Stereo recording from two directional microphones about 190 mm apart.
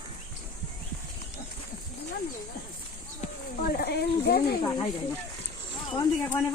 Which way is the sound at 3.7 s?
55° left (ahead or behind).